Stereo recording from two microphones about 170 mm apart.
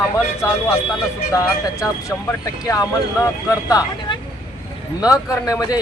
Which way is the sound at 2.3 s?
15° left (ahead or behind).